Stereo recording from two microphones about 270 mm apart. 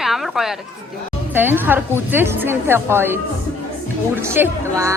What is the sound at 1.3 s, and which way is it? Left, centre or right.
A woman's voice, centre.